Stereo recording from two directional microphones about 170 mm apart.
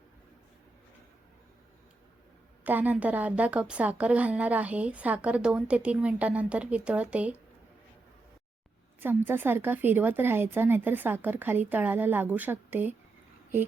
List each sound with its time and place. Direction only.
2.6 s a woman's voice: 10° right (ahead or behind)
9.0 s a woman's voice: 10° right (ahead or behind)